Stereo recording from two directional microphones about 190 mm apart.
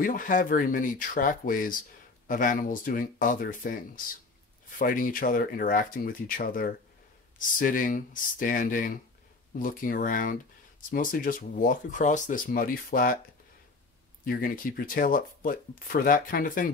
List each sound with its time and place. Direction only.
0.0 s speech: 45° left (ahead or behind)
14.2 s speech: 50° left (ahead or behind)